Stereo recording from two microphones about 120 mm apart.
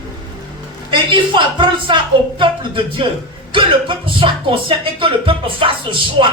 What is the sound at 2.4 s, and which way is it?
Music, 45° right (ahead or behind).